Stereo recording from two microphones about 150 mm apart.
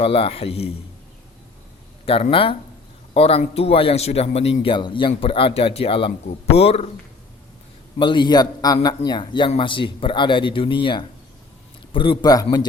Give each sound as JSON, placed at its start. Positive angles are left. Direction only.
{"t": 0.0, "sound": "speech", "side_deg": 40}
{"t": 2.3, "sound": "speech", "side_deg": 35}
{"t": 7.9, "sound": "a man's voice", "side_deg": 35}